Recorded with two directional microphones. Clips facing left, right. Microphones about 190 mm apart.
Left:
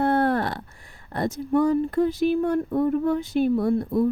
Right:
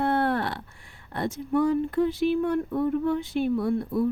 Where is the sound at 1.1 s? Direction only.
40° left (ahead or behind).